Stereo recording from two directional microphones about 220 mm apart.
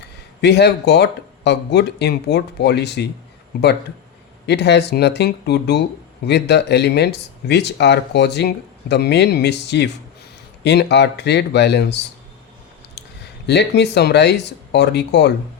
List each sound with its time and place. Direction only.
0.4 s speech: 50° left (ahead or behind)
4.4 s speech: 50° left (ahead or behind)
13.5 s speech: 50° left (ahead or behind)